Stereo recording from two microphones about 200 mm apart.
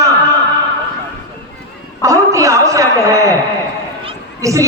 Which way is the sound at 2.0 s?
15° right (ahead or behind).